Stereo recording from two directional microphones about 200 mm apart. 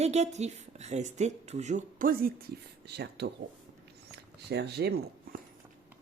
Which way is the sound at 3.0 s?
55° right (ahead or behind).